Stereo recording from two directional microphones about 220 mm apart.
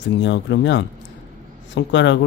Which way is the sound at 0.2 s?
50° left (ahead or behind).